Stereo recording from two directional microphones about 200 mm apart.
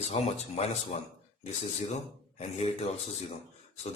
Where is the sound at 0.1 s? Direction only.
30° left (ahead or behind).